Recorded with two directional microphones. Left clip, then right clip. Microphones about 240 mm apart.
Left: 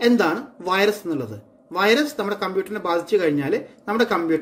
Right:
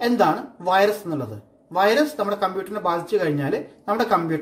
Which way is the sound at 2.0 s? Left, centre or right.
Left.